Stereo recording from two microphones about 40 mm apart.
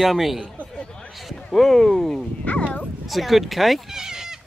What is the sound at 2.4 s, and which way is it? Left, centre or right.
Bow-wow, left.